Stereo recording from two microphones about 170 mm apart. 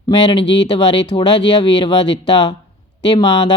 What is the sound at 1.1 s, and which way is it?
Speech, 25° left (ahead or behind).